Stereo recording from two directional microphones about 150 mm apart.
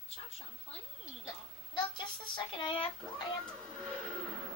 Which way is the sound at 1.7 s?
30° left (ahead or behind).